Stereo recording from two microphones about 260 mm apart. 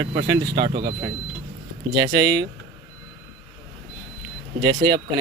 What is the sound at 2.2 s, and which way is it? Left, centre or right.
Speech, right.